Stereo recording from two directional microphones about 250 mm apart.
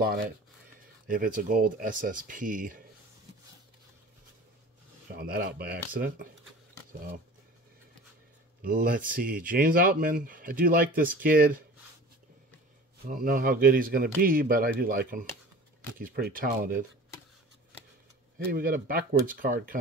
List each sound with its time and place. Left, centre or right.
0.0 s a man's voice: right
5.1 s a man's voice: right
8.6 s a man's voice: right
13.0 s a man's voice: right
18.4 s a man's voice: right